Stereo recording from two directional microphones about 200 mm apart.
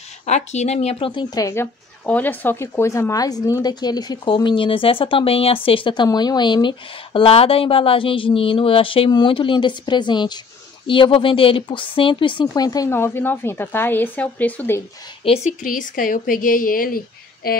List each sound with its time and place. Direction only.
0.2 s speech: 35° left (ahead or behind); by 14.8 s 10° left (ahead or behind)
15.2 s a woman's voice: 35° left (ahead or behind)